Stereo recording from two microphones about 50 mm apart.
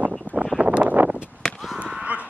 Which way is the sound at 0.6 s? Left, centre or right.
Right.